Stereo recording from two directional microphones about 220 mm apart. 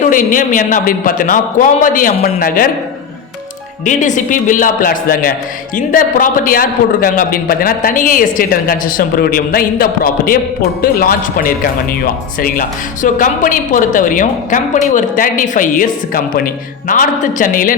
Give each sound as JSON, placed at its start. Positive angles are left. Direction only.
{"t": 0.0, "sound": "a man's voice", "side_deg": 35}
{"t": 3.8, "sound": "a man's voice", "side_deg": 35}